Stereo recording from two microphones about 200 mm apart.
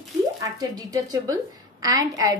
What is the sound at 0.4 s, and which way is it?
A woman's voice, 20° right (ahead or behind).